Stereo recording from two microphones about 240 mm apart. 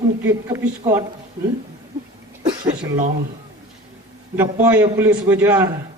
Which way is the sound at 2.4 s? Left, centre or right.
Centre.